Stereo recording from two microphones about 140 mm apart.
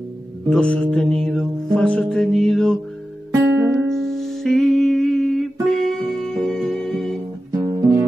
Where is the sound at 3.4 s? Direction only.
15° right (ahead or behind).